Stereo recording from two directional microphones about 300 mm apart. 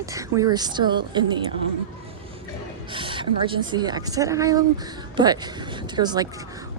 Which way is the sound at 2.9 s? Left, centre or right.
Centre.